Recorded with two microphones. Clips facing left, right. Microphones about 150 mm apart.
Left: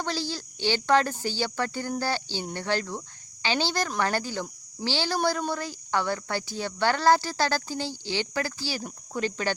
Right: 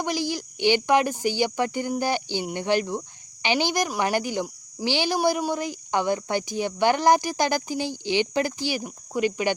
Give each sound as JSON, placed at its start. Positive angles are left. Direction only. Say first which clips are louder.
{"t": 0.0, "sound": "speech", "louder": "right 4 dB", "side_deg": -15}